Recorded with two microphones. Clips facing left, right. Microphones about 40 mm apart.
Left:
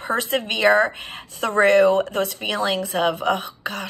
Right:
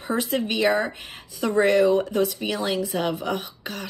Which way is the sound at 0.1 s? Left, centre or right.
Left.